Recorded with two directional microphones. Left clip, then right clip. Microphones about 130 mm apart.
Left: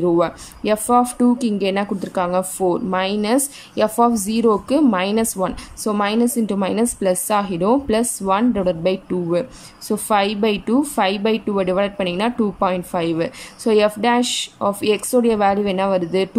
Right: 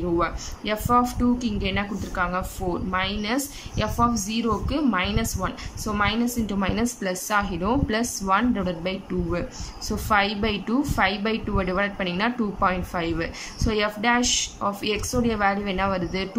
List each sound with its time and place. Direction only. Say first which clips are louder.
0.2 s speech: left 6 dB; 40° left (ahead or behind)